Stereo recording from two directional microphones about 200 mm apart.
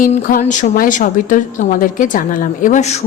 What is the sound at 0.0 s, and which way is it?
A woman's voice, 45° left (ahead or behind).